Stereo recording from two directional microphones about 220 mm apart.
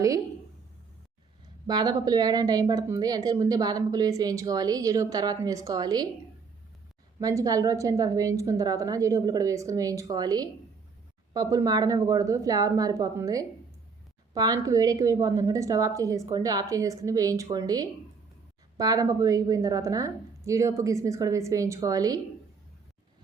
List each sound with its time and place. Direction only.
1.6 s a woman's voice: 20° right (ahead or behind)
7.2 s a woman's voice: 15° right (ahead or behind)